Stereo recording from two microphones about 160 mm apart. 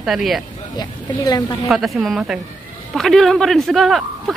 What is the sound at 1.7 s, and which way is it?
Speech, centre (ahead or behind).